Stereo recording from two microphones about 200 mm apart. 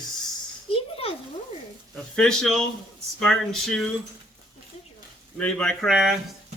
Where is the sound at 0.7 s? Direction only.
30° left (ahead or behind).